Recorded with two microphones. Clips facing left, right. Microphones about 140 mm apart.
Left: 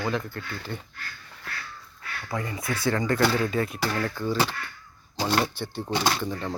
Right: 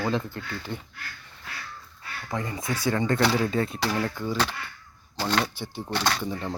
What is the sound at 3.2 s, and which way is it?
Speech, centre (ahead or behind).